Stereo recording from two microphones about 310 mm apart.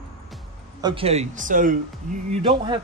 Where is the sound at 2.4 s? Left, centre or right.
Centre.